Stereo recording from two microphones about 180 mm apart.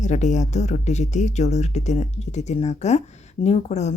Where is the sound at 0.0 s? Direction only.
40° left (ahead or behind).